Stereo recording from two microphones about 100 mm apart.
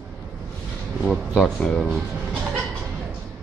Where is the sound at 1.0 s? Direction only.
5° left (ahead or behind).